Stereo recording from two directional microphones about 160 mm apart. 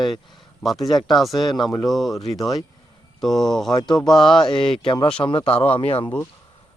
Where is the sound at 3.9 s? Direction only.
Centre (ahead or behind).